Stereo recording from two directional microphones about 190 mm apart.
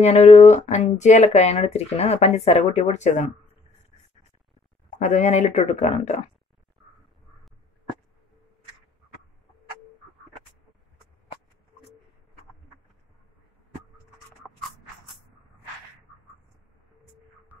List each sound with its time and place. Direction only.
0.0 s speech: 35° left (ahead or behind)
4.8 s speech: 40° left (ahead or behind)
14.4 s a sound: centre (ahead or behind)